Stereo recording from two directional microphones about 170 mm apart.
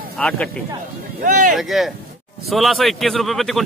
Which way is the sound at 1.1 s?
50° right (ahead or behind).